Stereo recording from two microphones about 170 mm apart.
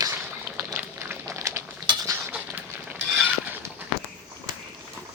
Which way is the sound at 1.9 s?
25° right (ahead or behind).